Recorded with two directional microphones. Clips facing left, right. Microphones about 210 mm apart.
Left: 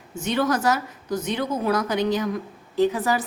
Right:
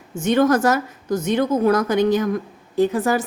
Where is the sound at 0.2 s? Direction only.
50° right (ahead or behind).